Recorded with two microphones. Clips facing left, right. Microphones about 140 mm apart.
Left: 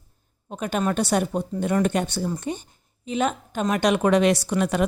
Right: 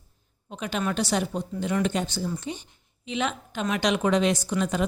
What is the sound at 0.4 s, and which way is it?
Speech, 50° left (ahead or behind).